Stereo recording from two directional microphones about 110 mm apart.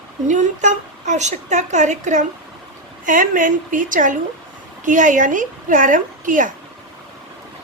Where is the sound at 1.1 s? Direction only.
90° right.